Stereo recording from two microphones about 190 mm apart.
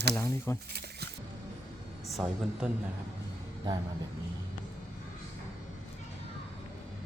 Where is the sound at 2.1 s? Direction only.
Centre (ahead or behind).